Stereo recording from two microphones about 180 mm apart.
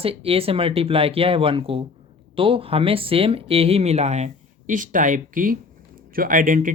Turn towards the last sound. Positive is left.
turn(degrees=-50)  # may be behind; listen again after turning